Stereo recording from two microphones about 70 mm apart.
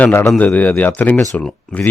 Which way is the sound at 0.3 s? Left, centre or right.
Left.